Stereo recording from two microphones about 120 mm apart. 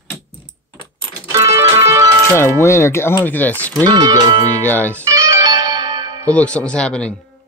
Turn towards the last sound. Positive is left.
turn(degrees=10)  # may be behind; listen again after turning